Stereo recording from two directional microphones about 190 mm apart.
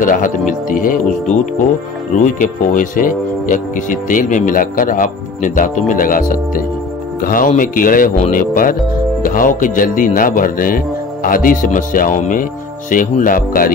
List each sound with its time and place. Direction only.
0.0 s speech: 45° left (ahead or behind)